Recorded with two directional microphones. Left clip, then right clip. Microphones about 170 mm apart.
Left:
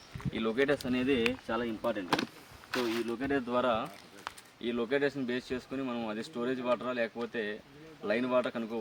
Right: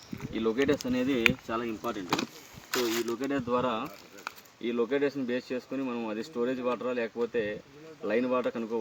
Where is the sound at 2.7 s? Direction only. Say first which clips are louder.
Right 3 dB; 75° right (ahead or behind).